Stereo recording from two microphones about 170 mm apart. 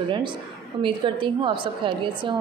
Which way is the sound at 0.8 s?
30° right (ahead or behind).